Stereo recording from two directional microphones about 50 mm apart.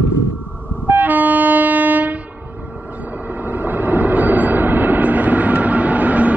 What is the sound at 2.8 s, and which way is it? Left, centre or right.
Vehicle, right.